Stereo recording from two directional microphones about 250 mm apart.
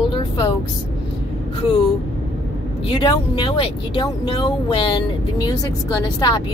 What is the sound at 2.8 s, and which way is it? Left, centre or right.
Speech, centre.